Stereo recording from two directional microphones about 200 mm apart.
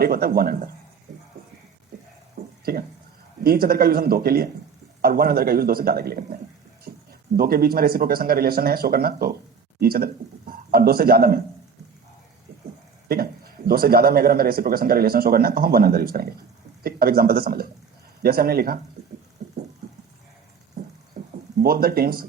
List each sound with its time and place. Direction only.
0.0 s a man's voice: 50° right (ahead or behind)
3.4 s a man's voice: 50° right (ahead or behind)
9.8 s a sound: 50° right (ahead or behind)
13.1 s a man's voice: 50° right (ahead or behind)
21.6 s a man's voice: 50° right (ahead or behind)